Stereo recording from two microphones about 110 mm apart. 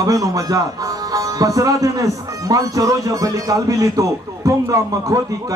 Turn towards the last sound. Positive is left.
turn(degrees=-30)  # may be behind; listen again after turning